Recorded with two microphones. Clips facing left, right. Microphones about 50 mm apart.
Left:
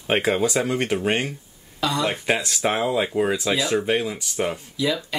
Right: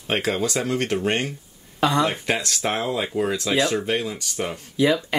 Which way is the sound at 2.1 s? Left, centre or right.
Centre.